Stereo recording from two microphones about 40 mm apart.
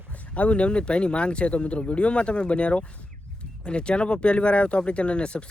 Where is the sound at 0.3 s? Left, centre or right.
Left.